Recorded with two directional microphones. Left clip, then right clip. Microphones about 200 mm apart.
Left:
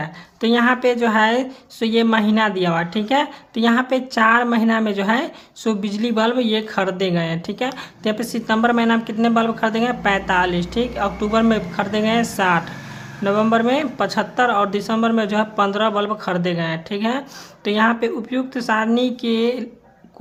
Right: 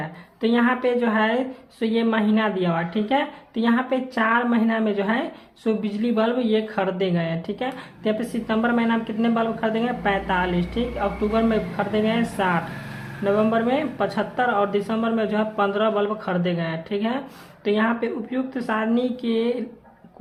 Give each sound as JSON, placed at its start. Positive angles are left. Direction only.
{"t": 0.0, "sound": "speech", "side_deg": 30}